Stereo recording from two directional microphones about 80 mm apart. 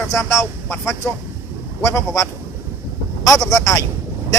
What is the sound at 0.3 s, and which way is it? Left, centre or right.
Speech, left.